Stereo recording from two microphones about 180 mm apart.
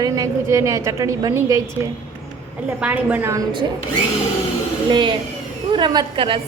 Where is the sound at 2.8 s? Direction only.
10° right (ahead or behind).